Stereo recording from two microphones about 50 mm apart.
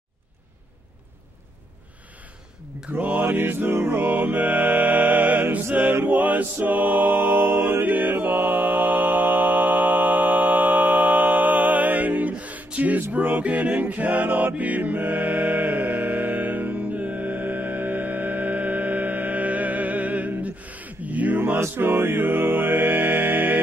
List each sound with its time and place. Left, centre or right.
3.0 s mantra: right
3.3 s mantra: right
6.0 s music: right
12.7 s a sound: right
13.1 s music: right
21.7 s music: right